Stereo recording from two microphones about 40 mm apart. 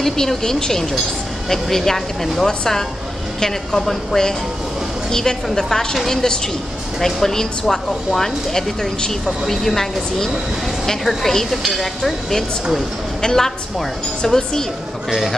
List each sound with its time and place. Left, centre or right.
0.0 s speech: centre
7.0 s speech: centre